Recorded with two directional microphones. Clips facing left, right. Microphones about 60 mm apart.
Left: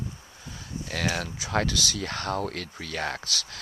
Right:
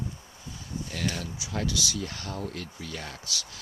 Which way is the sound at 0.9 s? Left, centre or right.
Left.